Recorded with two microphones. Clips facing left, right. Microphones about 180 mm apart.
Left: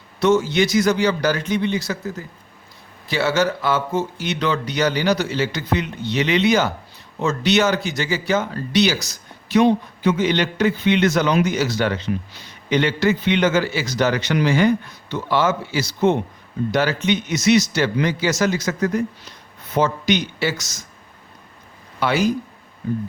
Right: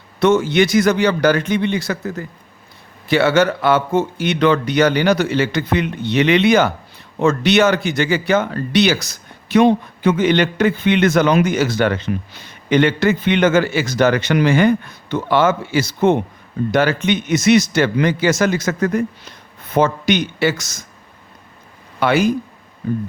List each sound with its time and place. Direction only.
0.2 s speech: 55° right (ahead or behind)
22.0 s speech: 55° right (ahead or behind)